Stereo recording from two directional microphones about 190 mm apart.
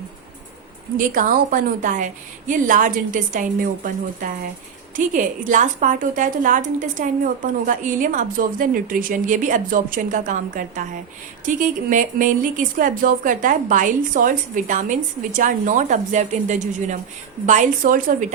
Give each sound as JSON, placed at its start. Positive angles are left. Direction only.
{"t": 0.9, "sound": "speech", "side_deg": -45}